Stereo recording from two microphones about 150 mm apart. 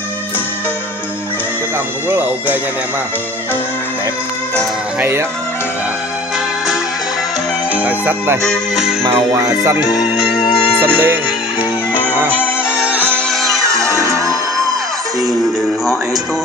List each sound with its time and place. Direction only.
2.0 s speech: 10° right (ahead or behind)
7.7 s speech: 10° right (ahead or behind)
8.5 s music: 5° right (ahead or behind)
9.1 s speech: 20° right (ahead or behind)
10.8 s speech: 15° right (ahead or behind)
12.1 s music: 10° right (ahead or behind)
12.4 s music: 15° left (ahead or behind)
13.6 s music: 20° right (ahead or behind)